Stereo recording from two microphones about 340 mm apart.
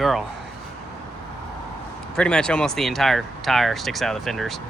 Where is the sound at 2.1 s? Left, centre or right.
Centre.